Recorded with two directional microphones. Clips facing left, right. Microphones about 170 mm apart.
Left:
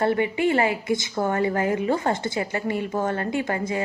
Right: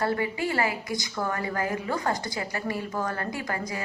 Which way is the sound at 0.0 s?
20° left (ahead or behind).